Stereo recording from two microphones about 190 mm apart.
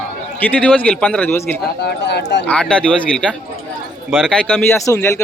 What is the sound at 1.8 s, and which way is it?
Speech, 60° left (ahead or behind).